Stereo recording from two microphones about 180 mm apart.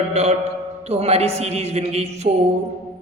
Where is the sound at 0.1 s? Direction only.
35° right (ahead or behind).